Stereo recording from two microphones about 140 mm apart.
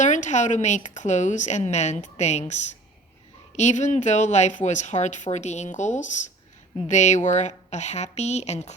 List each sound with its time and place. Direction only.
0.0 s speech: 60° left (ahead or behind)